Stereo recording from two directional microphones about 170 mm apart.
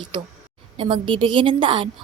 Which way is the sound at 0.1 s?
30° right (ahead or behind).